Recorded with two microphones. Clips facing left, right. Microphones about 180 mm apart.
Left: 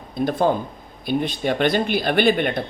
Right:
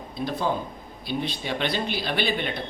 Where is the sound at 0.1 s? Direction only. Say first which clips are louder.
Left 7 dB; 50° left (ahead or behind).